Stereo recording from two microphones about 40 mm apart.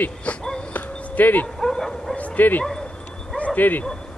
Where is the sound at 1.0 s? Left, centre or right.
Left.